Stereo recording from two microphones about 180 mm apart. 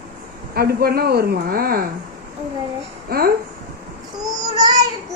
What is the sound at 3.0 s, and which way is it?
Speech, 55° right (ahead or behind).